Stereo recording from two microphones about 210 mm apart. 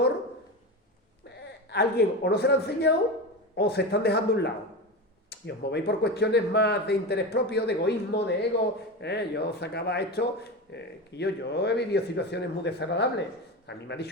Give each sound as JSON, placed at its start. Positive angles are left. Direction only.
{"t": 1.4, "sound": "speech", "side_deg": 50}